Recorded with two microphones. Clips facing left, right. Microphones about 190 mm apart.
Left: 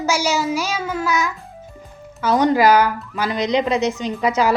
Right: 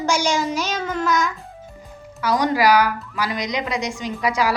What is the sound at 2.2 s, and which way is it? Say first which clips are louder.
A woman's voice: left 3 dB; 25° left (ahead or behind).